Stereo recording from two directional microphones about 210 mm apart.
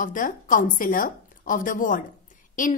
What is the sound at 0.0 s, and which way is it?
A woman's voice, 40° left (ahead or behind).